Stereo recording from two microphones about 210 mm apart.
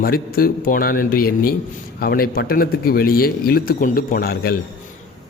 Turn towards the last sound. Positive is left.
turn(degrees=45)  # may be behind; listen again after turning